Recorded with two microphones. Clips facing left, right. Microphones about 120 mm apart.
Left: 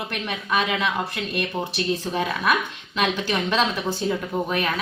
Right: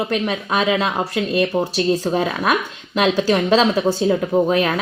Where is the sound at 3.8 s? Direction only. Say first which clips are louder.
Right 8 dB; 45° right (ahead or behind).